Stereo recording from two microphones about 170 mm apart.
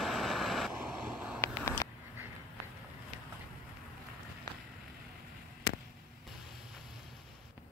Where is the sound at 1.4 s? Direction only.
15° left (ahead or behind).